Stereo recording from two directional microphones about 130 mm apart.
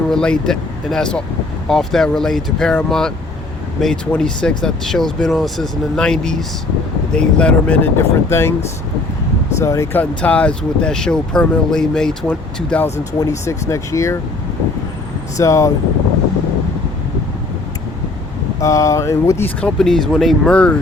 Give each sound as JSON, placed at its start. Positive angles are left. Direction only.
{"t": 0.1, "sound": "speech", "side_deg": 5}
{"t": 9.6, "sound": "speech", "side_deg": 25}
{"t": 13.1, "sound": "speech", "side_deg": 25}
{"t": 15.4, "sound": "speech", "side_deg": 25}
{"t": 18.6, "sound": "speech", "side_deg": 25}
{"t": 19.6, "sound": "speech", "side_deg": 5}